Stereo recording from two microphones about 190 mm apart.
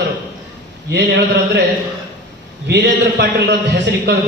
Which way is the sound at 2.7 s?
65° right (ahead or behind).